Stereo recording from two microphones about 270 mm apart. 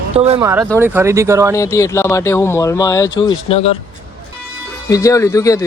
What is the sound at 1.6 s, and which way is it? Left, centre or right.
Speech, centre.